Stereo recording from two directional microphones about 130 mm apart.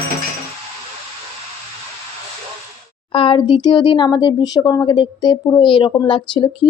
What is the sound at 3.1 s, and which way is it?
Speech, 45° left (ahead or behind).